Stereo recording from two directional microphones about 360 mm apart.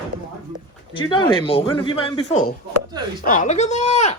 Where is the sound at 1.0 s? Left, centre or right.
Centre.